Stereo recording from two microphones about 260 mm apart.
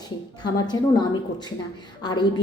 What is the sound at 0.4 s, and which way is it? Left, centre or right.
Speech, centre.